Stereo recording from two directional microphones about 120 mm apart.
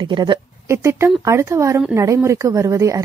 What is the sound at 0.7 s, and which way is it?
A woman's voice, 20° right (ahead or behind).